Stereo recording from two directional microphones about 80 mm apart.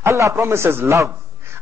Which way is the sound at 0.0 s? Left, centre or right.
Right.